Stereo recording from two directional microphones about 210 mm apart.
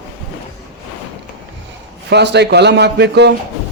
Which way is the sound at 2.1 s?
55° right (ahead or behind).